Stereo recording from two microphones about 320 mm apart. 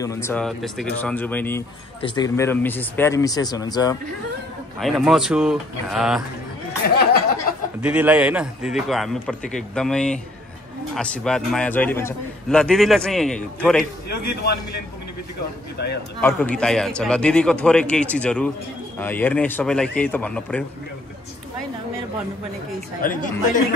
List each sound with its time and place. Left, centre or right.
0.0 s a man's voice: centre
4.7 s a man's voice: centre
6.8 s speech: left
7.8 s a man's voice: centre
14.0 s a man's voice: left
16.2 s a man's voice: centre
23.0 s speech: left